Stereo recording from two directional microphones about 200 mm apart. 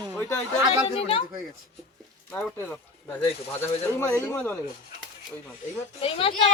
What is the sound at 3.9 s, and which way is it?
Speech, 15° left (ahead or behind).